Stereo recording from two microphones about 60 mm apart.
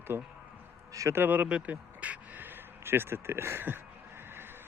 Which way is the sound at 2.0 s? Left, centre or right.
Right.